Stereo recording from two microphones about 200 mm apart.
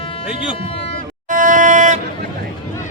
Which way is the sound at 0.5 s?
30° left (ahead or behind).